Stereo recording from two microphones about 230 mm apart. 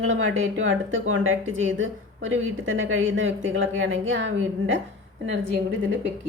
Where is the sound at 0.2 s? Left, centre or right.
Right.